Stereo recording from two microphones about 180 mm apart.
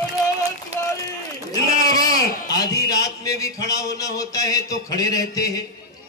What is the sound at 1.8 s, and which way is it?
Speech, 20° left (ahead or behind).